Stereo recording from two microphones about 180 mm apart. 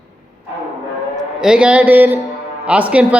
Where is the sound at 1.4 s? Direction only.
5° right (ahead or behind).